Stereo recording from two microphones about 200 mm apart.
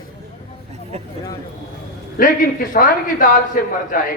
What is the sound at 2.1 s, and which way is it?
A man's voice, 45° left (ahead or behind).